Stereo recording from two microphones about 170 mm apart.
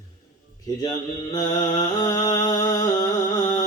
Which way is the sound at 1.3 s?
25° left (ahead or behind).